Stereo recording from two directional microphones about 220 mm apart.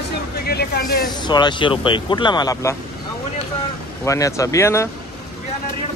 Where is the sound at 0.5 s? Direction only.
45° left (ahead or behind).